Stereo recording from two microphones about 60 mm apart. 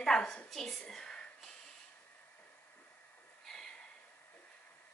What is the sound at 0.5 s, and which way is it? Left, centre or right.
Speech, centre.